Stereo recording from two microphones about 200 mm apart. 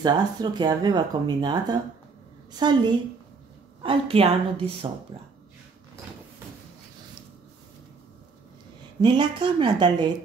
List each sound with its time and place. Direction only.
0.0 s speech: 20° right (ahead or behind)
9.0 s speech: 25° right (ahead or behind)